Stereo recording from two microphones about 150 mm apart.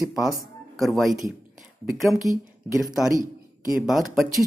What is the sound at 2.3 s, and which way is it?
Speech, 20° right (ahead or behind).